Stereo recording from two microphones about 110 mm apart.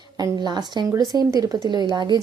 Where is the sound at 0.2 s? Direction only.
40° right (ahead or behind).